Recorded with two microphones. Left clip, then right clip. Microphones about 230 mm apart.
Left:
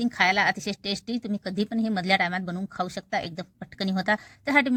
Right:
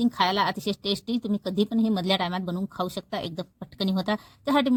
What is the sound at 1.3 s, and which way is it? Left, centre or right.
Speech, left.